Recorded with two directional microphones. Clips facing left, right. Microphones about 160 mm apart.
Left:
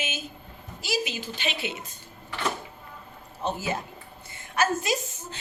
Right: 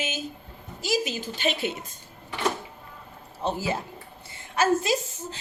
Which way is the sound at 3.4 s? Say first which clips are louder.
Right 2 dB; 30° right (ahead or behind).